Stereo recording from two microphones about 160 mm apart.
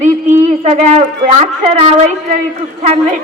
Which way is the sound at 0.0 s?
45° right (ahead or behind).